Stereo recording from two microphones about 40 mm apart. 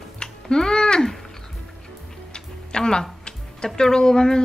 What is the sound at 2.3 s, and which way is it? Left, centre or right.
Music, left.